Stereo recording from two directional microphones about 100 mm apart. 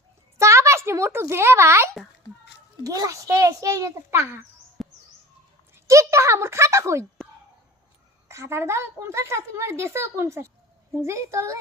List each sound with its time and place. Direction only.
0.3 s a sound: 30° right (ahead or behind)
2.8 s a child's voice: 35° right (ahead or behind)
4.8 s bird: centre (ahead or behind)
5.7 s speech: 30° right (ahead or behind)
8.3 s a child's voice: 25° right (ahead or behind)